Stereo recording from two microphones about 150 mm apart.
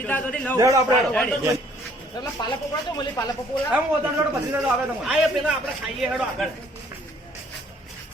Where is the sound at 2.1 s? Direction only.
25° left (ahead or behind).